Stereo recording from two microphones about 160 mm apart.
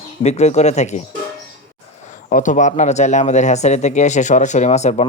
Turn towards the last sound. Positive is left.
turn(degrees=45)  # may be behind; listen again after turning